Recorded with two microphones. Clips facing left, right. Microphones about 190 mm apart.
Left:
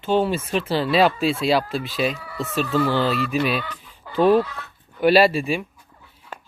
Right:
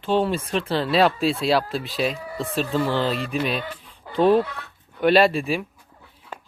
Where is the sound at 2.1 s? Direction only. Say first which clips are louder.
Even; 40° right (ahead or behind).